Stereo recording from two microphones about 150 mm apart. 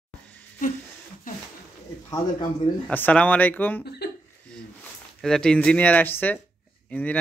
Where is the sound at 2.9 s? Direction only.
10° left (ahead or behind).